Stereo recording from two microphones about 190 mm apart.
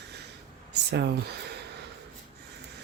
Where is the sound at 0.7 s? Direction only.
60° right (ahead or behind).